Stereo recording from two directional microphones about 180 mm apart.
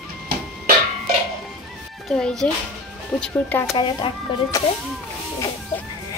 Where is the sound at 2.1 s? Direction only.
5° left (ahead or behind).